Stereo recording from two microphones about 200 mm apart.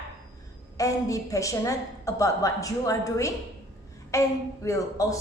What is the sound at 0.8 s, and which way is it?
A woman's voice, 15° left (ahead or behind).